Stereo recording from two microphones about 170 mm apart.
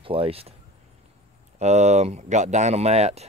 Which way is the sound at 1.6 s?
40° right (ahead or behind).